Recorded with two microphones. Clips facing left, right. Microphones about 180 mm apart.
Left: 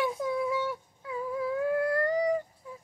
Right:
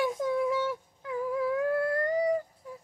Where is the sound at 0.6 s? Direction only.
85° right.